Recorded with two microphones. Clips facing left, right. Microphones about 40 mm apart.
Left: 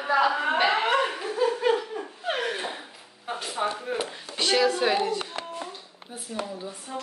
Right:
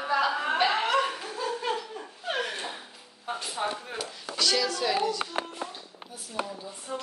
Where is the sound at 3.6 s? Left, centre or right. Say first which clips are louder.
Left 3 dB; left.